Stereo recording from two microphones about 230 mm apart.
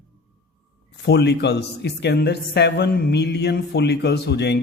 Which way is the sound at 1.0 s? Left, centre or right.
Left.